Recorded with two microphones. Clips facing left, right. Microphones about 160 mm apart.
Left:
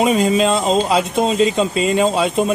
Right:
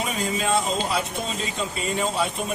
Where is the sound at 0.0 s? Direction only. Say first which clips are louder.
Left 12 dB; 90° left.